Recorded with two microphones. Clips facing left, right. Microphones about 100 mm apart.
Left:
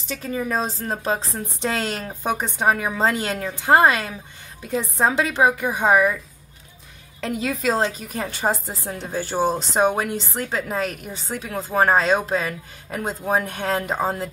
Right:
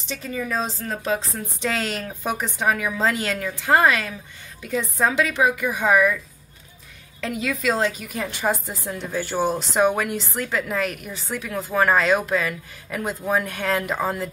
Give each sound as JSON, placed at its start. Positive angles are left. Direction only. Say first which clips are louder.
{"t": 0.0, "sound": "a woman's voice", "louder": "left 2 dB", "side_deg": 45}
{"t": 7.2, "sound": "a woman's voice", "louder": "left 1 dB", "side_deg": 35}
{"t": 8.8, "sound": "a woman's voice", "louder": "even", "side_deg": 20}